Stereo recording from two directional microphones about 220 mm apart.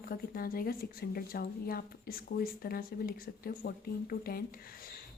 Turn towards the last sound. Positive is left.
turn(degrees=40)  # may be behind; listen again after turning